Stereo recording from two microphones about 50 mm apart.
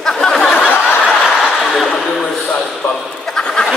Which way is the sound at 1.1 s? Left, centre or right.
Centre.